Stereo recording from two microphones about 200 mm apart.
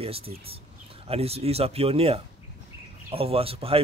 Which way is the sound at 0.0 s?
30° right (ahead or behind).